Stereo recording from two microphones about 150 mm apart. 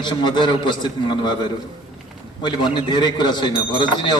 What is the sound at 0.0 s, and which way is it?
A man's voice, 30° left (ahead or behind).